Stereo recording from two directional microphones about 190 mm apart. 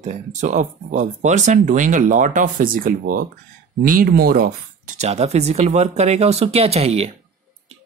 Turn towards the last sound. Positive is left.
turn(degrees=-30)  # may be behind; listen again after turning